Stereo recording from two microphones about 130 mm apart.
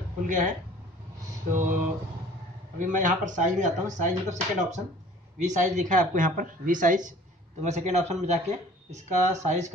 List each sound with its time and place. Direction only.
0.3 s speech: 85° right
2.8 s speech: 85° right
7.6 s speech: 60° right (ahead or behind)